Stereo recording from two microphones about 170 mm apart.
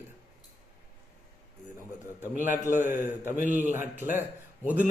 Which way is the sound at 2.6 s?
15° right (ahead or behind).